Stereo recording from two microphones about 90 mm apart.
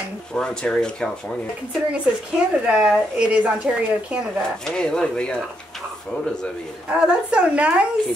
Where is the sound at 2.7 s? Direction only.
10° right (ahead or behind).